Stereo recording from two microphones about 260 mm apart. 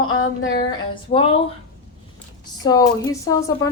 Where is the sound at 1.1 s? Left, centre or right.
Left.